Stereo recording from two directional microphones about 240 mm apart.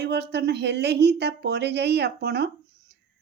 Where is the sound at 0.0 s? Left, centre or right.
Right.